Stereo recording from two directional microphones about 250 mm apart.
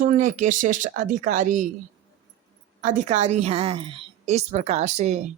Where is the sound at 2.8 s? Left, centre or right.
Right.